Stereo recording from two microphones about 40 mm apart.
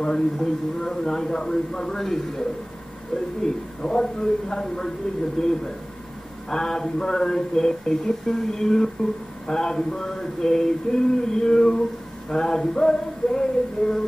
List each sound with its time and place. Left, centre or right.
0.0 s a man's voice: centre
3.4 s a man's voice: centre